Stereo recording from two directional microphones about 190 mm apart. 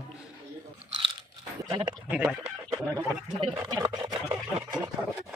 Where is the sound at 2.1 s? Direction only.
5° right (ahead or behind).